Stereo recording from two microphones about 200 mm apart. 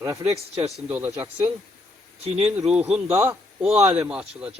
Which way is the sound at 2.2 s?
30° right (ahead or behind).